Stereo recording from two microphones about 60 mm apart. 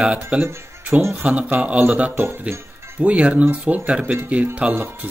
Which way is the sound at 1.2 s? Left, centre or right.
Centre.